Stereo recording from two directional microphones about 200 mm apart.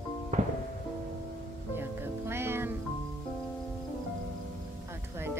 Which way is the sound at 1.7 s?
10° right (ahead or behind).